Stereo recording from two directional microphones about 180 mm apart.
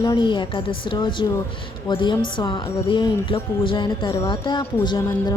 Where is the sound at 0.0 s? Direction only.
20° left (ahead or behind).